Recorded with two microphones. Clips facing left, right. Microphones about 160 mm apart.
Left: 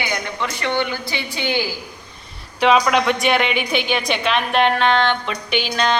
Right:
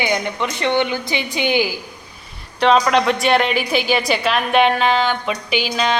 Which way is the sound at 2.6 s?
5° left (ahead or behind).